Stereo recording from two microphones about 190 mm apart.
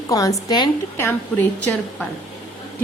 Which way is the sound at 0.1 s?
20° left (ahead or behind).